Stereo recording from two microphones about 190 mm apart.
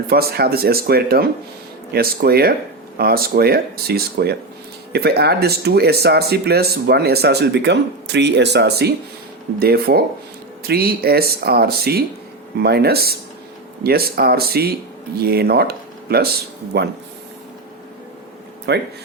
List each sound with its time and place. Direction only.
0.1 s speech: 55° right (ahead or behind)
18.7 s speech: 65° right (ahead or behind)